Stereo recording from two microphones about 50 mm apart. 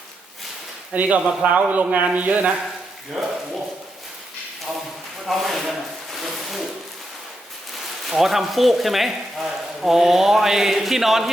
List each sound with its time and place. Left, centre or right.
0.9 s speech: right
3.2 s speech: centre
5.2 s speech: centre
8.1 s speech: centre